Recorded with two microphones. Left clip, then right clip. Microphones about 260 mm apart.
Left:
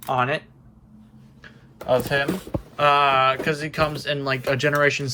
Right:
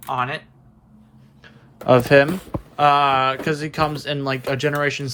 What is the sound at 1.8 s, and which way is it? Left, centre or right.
Speech, right.